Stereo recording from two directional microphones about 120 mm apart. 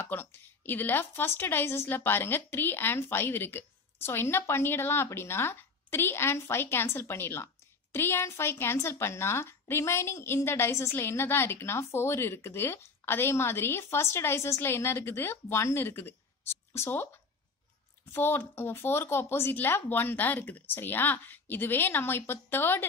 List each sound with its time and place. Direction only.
0.0 s speech: 15° left (ahead or behind)
18.1 s speech: 20° left (ahead or behind)